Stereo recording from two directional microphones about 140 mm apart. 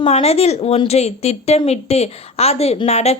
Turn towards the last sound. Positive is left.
turn(degrees=50)  # may be behind; listen again after turning